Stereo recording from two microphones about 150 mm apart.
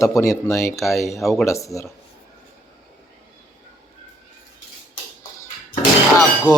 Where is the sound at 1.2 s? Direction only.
Centre (ahead or behind).